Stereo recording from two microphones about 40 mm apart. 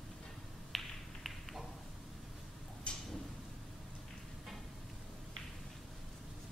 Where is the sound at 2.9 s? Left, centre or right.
Left.